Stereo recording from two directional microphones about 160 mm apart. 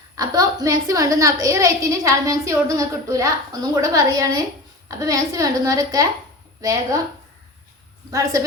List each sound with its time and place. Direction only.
0.2 s a woman's voice: 20° right (ahead or behind)
8.1 s a woman's voice: 20° right (ahead or behind)